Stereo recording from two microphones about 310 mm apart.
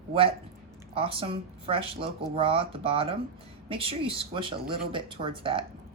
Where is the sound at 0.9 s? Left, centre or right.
Centre.